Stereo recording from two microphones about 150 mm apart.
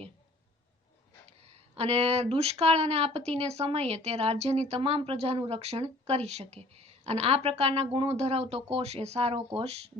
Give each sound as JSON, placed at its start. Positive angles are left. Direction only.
{"t": 1.4, "sound": "a woman's voice", "side_deg": -45}